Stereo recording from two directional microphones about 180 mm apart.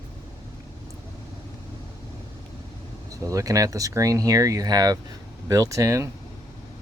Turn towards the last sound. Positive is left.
turn(degrees=-15)  # may be behind; listen again after turning